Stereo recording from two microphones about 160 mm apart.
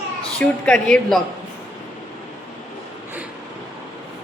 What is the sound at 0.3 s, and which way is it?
Speech, 5° left (ahead or behind).